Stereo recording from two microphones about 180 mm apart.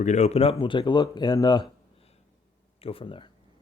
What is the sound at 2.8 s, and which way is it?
Speech, 30° left (ahead or behind).